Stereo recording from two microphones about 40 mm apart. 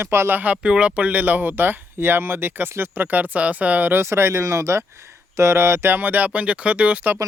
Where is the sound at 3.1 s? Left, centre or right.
Right.